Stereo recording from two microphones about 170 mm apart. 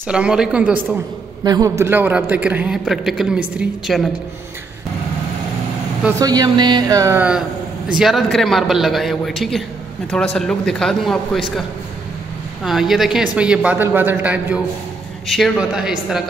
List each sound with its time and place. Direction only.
0.1 s a man's voice: 5° right (ahead or behind)
1.4 s a man's voice: 20° right (ahead or behind); by 4.1 s centre (ahead or behind)
6.0 s speech: 20° right (ahead or behind)
8.0 s a man's voice: centre (ahead or behind)
12.6 s a man's voice: centre (ahead or behind)